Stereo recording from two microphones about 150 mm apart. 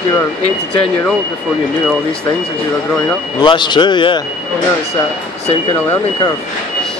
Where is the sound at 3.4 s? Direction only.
30° left (ahead or behind).